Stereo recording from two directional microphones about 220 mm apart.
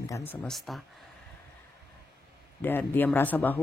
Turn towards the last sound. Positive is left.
turn(degrees=10)  # may be behind; listen again after turning